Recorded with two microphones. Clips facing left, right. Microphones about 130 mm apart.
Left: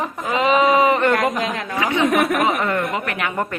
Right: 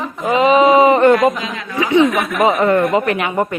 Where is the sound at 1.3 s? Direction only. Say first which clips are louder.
Left 2 dB; 55° left (ahead or behind).